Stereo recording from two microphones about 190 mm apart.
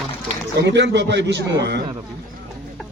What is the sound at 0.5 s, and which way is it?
A man's voice, 65° right (ahead or behind).